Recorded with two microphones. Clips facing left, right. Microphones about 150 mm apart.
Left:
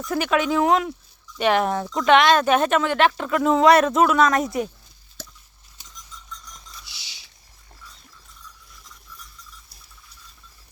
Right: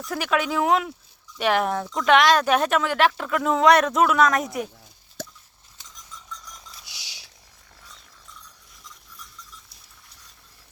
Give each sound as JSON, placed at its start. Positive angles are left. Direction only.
{"t": 0.0, "sound": "speech", "side_deg": 0}
{"t": 5.2, "sound": "plop", "side_deg": -55}